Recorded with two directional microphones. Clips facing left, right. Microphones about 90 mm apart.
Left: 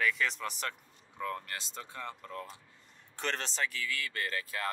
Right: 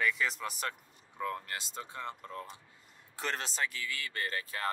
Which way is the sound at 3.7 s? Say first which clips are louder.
Left 2 dB; 20° right (ahead or behind).